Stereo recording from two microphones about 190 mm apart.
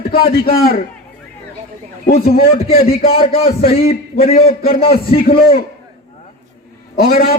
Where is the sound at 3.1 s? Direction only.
30° left (ahead or behind).